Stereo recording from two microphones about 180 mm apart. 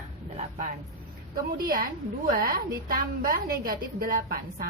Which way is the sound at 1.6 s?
55° right (ahead or behind).